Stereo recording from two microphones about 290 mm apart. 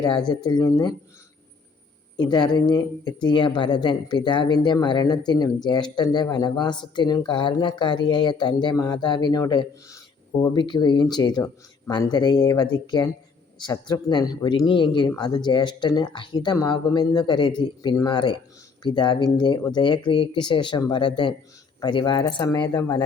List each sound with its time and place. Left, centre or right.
0.3 s speech: centre
2.1 s speech: centre